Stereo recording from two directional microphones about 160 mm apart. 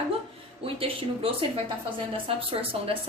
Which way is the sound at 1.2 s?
35° right (ahead or behind).